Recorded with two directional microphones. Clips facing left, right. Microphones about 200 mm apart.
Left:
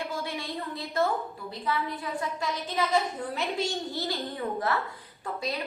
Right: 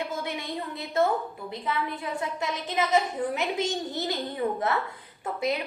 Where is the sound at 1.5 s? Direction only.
20° right (ahead or behind).